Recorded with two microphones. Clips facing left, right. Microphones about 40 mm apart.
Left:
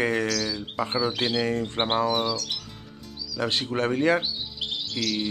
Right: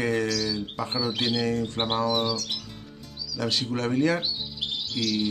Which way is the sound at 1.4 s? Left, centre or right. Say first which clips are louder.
Left 1 dB; left.